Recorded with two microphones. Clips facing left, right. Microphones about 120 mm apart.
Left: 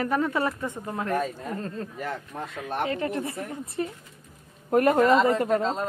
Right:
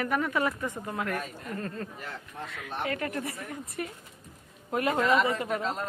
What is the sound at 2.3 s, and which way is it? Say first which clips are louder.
Speech: left 5 dB; 50° left (ahead or behind).